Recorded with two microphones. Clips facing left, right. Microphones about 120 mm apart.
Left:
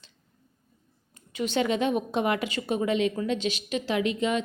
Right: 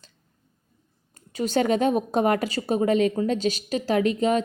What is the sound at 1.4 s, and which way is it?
A woman's voice, 40° right (ahead or behind).